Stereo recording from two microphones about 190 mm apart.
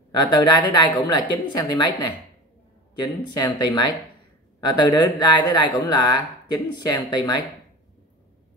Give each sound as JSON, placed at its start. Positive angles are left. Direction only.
{"t": 0.2, "sound": "speech", "side_deg": 20}